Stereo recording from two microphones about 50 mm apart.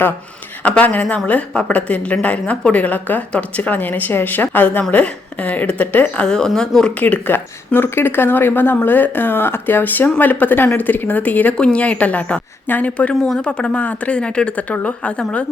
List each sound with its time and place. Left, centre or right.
0.6 s a woman's voice: left
6.2 s speech: centre
6.9 s speech: left
7.3 s a woman's voice: left